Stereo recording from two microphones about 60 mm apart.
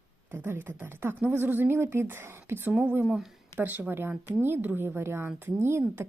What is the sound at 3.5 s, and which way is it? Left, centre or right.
Speech, right.